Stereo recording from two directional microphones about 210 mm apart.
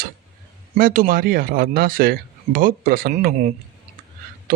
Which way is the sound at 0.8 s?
40° right (ahead or behind).